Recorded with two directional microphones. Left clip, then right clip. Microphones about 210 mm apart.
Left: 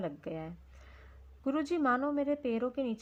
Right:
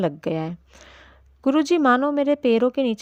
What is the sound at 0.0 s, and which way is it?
A woman's voice, 50° right (ahead or behind).